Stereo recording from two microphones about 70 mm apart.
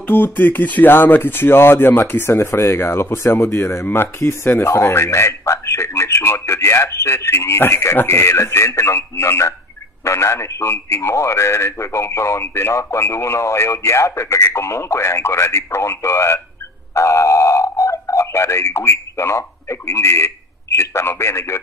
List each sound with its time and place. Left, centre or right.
0.0 s speech: left